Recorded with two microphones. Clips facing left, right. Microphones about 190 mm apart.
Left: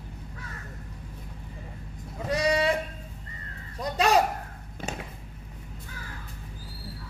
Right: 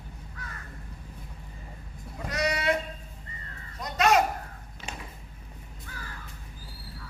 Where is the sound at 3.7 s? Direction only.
30° left (ahead or behind).